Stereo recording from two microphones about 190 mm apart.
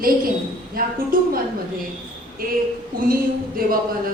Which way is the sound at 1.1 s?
50° right (ahead or behind).